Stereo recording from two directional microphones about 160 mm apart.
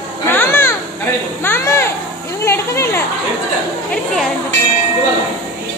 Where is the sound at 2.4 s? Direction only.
15° left (ahead or behind).